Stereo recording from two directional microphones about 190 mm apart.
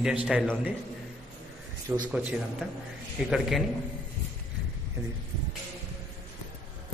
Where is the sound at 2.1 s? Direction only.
5° right (ahead or behind).